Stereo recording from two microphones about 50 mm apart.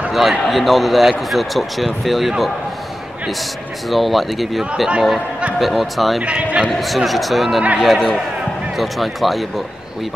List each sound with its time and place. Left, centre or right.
0.1 s speech: centre
3.9 s speech: centre
6.2 s speech: right
6.7 s speech: centre